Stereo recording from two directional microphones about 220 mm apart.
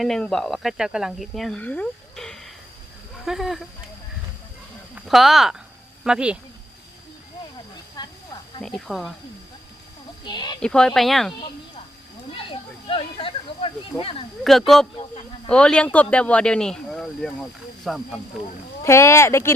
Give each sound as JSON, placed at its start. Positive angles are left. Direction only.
{"t": 0.0, "sound": "speech", "side_deg": 0}
{"t": 4.9, "sound": "speech", "side_deg": 0}
{"t": 8.0, "sound": "snake", "side_deg": 15}
{"t": 8.6, "sound": "speech", "side_deg": 0}
{"t": 10.2, "sound": "speech", "side_deg": 20}
{"t": 10.6, "sound": "speech", "side_deg": 5}
{"t": 12.3, "sound": "a sound", "side_deg": 25}
{"t": 14.4, "sound": "speech", "side_deg": 0}
{"t": 18.8, "sound": "speech", "side_deg": 10}